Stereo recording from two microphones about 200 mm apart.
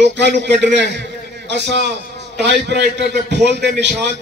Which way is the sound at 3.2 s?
60° right (ahead or behind).